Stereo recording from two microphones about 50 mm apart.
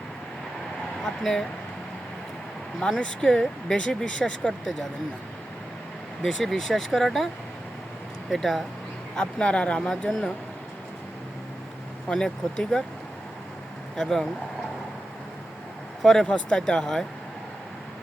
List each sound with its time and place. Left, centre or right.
1.2 s speech: centre
2.8 s speech: centre
6.2 s speech: centre
8.3 s speech: centre
9.1 s speech: left
10.1 s speech: centre
12.1 s speech: centre
13.9 s speech: centre
16.0 s speech: centre
16.2 s speech: left